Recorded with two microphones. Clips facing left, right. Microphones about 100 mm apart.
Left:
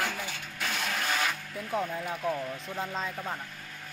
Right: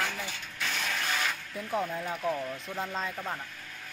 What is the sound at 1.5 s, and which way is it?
Speech, centre (ahead or behind).